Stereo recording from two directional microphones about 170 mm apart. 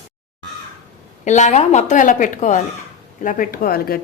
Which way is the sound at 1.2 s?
45° left (ahead or behind).